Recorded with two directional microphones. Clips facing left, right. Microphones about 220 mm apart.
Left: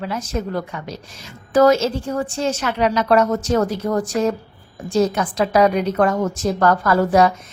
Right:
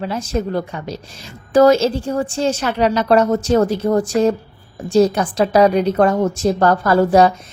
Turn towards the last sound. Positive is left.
turn(degrees=-30)  # may be behind; listen again after turning